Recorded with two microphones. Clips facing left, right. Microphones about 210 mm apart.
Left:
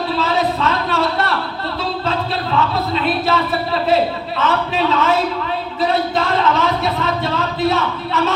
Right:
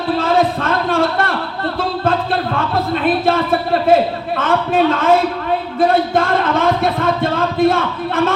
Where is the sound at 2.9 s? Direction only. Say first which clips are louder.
Right 4 dB; 50° right (ahead or behind).